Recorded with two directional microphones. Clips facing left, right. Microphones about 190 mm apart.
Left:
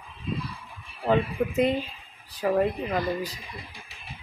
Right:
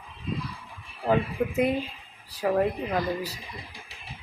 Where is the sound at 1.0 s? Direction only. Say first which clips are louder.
Left 1 dB; 10° right (ahead or behind).